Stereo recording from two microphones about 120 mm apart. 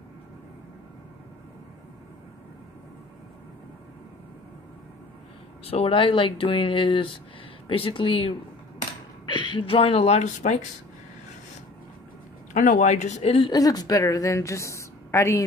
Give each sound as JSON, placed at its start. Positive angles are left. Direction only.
{"t": 5.7, "sound": "speech", "side_deg": 50}
{"t": 12.5, "sound": "speech", "side_deg": 80}
{"t": 13.5, "sound": "a woman's voice", "side_deg": 30}